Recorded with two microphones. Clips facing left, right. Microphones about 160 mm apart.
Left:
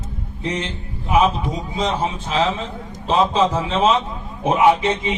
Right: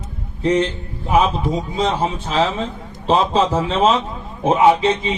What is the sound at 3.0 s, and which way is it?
A man's voice, 35° right (ahead or behind).